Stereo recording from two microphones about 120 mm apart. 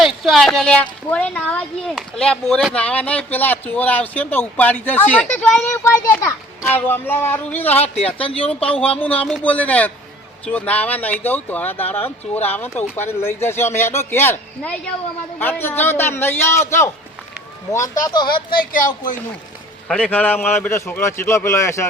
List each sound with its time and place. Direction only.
0.0 s speech: centre (ahead or behind); by 7.9 s 15° left (ahead or behind)
7.9 s speech: 55° left (ahead or behind)
9.0 s a man's voice: 15° left (ahead or behind)
18.0 s speech: 40° left (ahead or behind)
19.9 s a man's voice: 10° left (ahead or behind)